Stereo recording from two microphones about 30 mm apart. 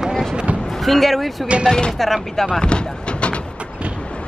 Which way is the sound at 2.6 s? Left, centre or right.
Left.